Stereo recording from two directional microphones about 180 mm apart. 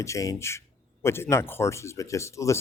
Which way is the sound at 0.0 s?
15° left (ahead or behind).